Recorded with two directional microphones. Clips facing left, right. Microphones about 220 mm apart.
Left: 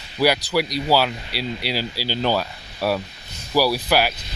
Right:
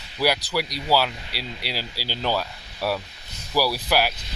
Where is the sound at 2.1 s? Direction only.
5° right (ahead or behind).